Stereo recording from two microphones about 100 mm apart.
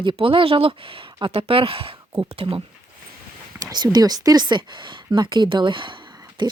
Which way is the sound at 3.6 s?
45° right (ahead or behind).